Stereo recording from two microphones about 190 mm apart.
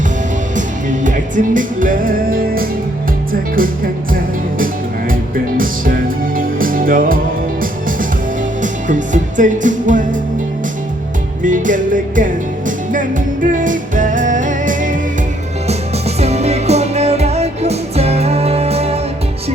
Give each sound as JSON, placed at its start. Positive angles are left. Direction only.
{"t": 0.5, "sound": "music", "side_deg": -40}
{"t": 4.1, "sound": "music", "side_deg": -50}
{"t": 11.4, "sound": "music", "side_deg": -45}